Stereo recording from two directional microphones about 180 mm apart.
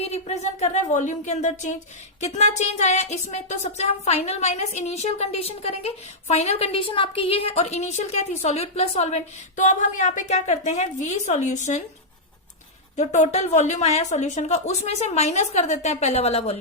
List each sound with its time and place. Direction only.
0.0 s speech: 35° left (ahead or behind)
13.0 s speech: 40° left (ahead or behind)